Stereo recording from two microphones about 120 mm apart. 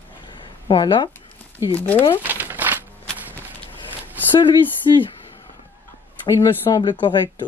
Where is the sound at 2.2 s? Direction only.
15° right (ahead or behind).